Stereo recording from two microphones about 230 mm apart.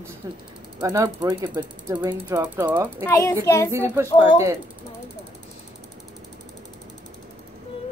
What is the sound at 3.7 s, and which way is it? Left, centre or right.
Speech, centre.